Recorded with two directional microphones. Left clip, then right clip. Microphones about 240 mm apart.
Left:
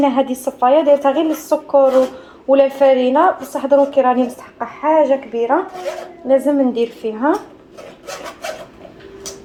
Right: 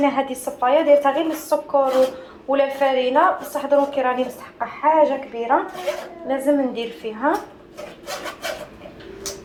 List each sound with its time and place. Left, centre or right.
0.0 s a woman's voice: left